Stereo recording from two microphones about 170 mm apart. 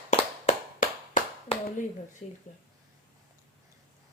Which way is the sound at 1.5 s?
35° left (ahead or behind).